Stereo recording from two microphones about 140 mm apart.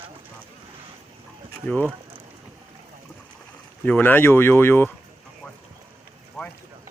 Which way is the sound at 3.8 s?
15° left (ahead or behind).